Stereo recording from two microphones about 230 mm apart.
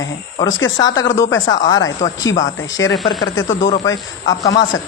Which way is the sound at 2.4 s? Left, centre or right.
Left.